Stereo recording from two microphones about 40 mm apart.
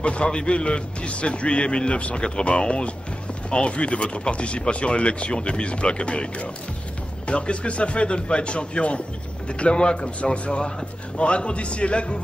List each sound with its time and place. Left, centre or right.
0.0 s speech: left